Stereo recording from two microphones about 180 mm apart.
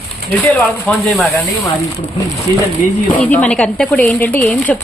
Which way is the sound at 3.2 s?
10° left (ahead or behind).